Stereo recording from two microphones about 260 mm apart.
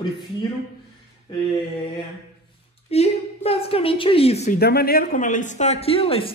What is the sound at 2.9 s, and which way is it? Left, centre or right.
Speech, left.